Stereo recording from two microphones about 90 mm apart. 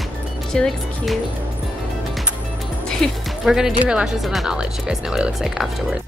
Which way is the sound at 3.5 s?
5° right (ahead or behind).